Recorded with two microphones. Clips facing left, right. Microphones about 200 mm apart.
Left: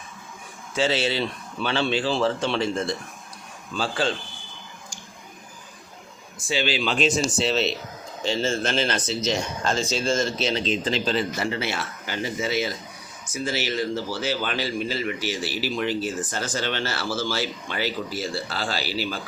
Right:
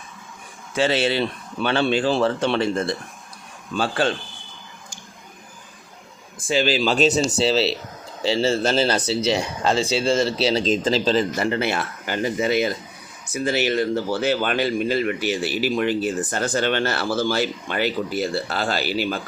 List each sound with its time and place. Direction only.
0.8 s speech: 60° right (ahead or behind)
6.5 s speech: 45° right (ahead or behind)
11.4 s speech: 55° right (ahead or behind)